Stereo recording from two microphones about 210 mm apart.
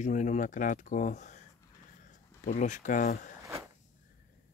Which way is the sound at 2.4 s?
35° left (ahead or behind).